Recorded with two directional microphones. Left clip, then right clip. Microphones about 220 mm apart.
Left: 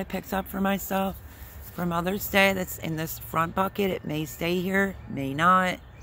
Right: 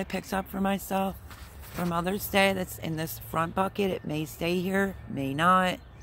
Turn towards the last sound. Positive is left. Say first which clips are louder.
# left 2 dB
turn(degrees=-5)  # may be behind; listen again after turning